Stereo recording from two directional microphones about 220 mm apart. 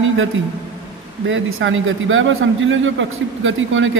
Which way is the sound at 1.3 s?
60° right (ahead or behind).